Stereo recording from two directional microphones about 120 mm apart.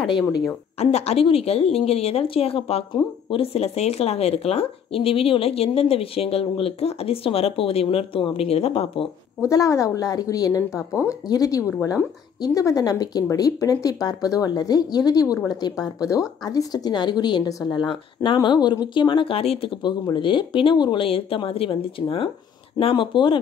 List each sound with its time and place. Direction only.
0.7 s a woman's voice: 60° left (ahead or behind)
9.5 s a woman's voice: 30° left (ahead or behind); by 23.4 s 45° left (ahead or behind)